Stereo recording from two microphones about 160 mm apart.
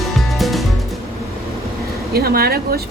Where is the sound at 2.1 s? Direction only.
75° right (ahead or behind).